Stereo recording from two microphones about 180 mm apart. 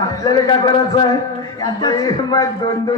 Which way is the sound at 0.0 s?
20° left (ahead or behind).